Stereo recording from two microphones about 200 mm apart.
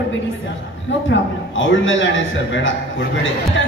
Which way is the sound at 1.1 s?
70° left (ahead or behind).